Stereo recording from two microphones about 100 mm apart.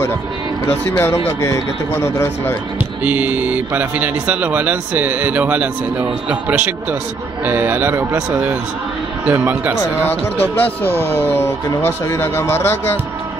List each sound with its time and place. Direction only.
0.7 s speech: 25° left (ahead or behind)
3.0 s speech: 15° right (ahead or behind)
9.8 s speech: 20° left (ahead or behind)